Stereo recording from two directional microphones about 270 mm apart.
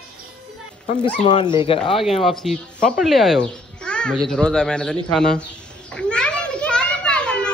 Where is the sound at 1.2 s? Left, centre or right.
Centre.